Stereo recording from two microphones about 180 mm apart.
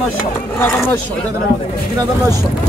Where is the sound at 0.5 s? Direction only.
10° left (ahead or behind).